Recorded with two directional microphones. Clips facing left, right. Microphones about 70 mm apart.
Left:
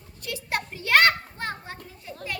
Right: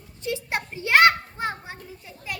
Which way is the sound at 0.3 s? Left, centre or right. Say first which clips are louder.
Right 2 dB; right.